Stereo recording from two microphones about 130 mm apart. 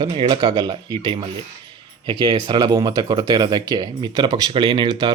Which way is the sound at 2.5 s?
30° right (ahead or behind).